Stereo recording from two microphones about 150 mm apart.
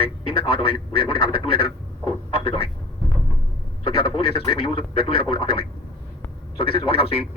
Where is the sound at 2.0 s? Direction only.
35° left (ahead or behind).